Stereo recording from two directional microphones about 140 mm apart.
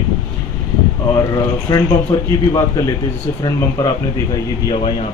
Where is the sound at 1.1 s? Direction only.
25° left (ahead or behind).